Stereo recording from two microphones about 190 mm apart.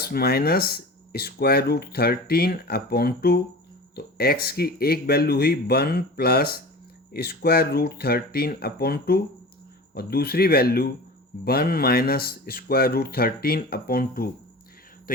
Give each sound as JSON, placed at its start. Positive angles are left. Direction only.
{"t": 0.0, "sound": "speech", "side_deg": 55}